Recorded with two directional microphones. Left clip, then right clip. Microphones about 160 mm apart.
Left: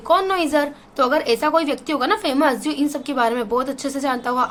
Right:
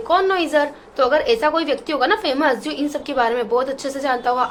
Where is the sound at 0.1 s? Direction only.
50° left (ahead or behind).